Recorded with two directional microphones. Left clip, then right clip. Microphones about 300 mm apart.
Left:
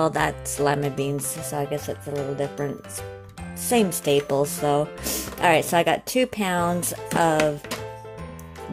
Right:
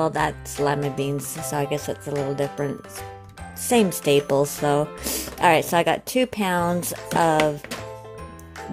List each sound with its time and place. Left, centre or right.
0.0 s speech: centre
3.6 s speech: centre